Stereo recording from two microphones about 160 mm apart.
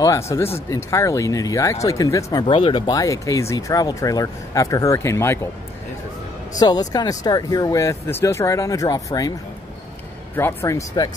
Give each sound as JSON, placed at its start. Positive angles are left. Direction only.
{"t": 0.0, "sound": "speech", "side_deg": 20}
{"t": 6.6, "sound": "speech", "side_deg": 25}
{"t": 10.3, "sound": "speech", "side_deg": 15}